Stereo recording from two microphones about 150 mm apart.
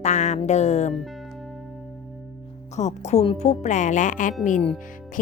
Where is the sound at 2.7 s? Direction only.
50° left (ahead or behind).